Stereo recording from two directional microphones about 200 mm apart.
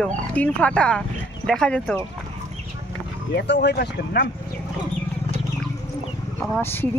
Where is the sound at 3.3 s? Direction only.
55° left (ahead or behind).